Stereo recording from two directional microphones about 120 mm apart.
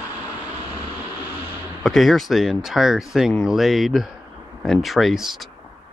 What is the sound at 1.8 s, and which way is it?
Speech, centre (ahead or behind).